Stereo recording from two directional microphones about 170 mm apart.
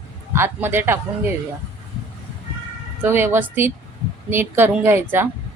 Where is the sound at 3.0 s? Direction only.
15° right (ahead or behind).